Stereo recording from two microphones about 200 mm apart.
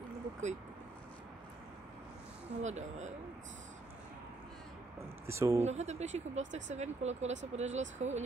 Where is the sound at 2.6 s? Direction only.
35° right (ahead or behind).